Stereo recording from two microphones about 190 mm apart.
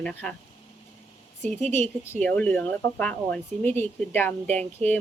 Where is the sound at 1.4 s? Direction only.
35° right (ahead or behind).